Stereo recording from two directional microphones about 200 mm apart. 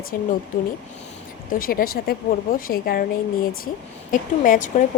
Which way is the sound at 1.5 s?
45° left (ahead or behind).